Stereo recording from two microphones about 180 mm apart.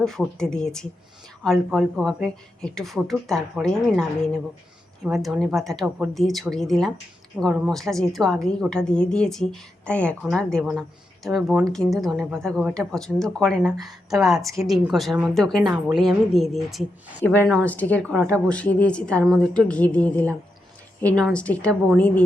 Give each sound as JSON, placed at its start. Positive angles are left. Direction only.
{"t": 0.0, "sound": "a woman's voice", "side_deg": 0}
{"t": 5.0, "sound": "a woman's voice", "side_deg": 0}
{"t": 14.4, "sound": "speech", "side_deg": -20}
{"t": 14.7, "sound": "a woman's voice", "side_deg": 0}
{"t": 17.2, "sound": "a woman's voice", "side_deg": 10}